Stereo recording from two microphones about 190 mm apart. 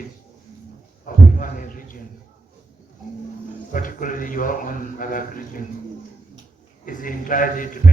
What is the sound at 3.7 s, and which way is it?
A man's voice, 45° left (ahead or behind).